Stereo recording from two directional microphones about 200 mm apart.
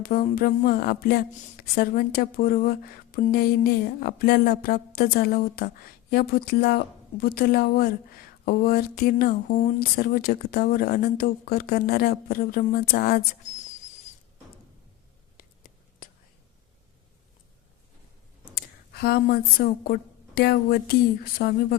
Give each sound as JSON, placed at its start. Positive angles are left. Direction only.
{"t": 0.0, "sound": "speech", "side_deg": 45}
{"t": 15.4, "sound": "whispering", "side_deg": 50}
{"t": 18.9, "sound": "speech", "side_deg": 50}